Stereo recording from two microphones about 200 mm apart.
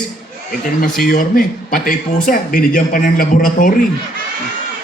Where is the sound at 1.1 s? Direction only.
45° left (ahead or behind).